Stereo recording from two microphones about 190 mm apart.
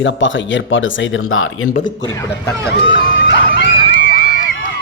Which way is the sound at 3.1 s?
70° left (ahead or behind).